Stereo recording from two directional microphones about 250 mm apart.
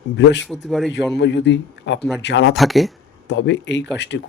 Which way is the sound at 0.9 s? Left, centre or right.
Left.